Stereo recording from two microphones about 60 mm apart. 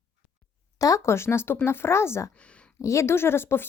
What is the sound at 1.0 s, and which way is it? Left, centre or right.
Speech, left.